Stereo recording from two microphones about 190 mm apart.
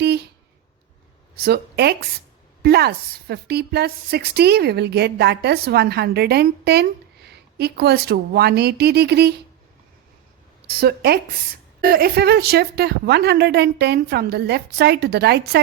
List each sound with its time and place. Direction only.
0.0 s a sound: 60° right (ahead or behind)
1.4 s a woman's voice: 60° right (ahead or behind)
10.7 s a woman's voice: 55° right (ahead or behind)